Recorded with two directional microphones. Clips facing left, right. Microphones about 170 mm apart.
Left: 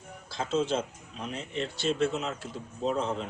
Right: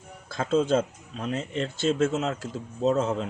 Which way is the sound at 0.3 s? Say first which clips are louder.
Right 5 dB; 50° right (ahead or behind).